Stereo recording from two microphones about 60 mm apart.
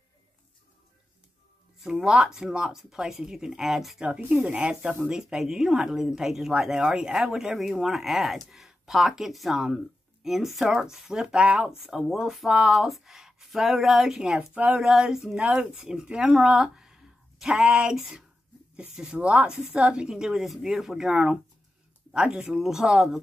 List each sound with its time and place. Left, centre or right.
1.8 s speech: centre
4.5 s speech: centre
14.5 s speech: right
14.8 s speech: centre
15.3 s speech: right